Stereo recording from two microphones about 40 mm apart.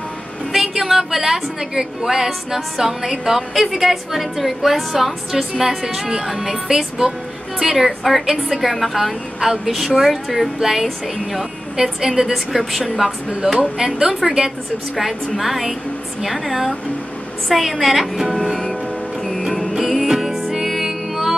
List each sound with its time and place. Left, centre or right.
0.5 s a woman's voice: centre
13.6 s a woman's voice: centre
18.3 s music: centre